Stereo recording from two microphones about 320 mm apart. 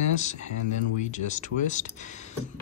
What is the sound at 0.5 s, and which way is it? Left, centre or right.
Speech, left.